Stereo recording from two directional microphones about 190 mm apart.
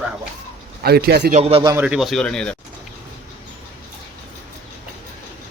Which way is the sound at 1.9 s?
Centre (ahead or behind).